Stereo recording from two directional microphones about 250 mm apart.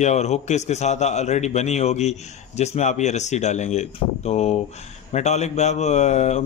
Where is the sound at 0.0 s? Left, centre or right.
Left.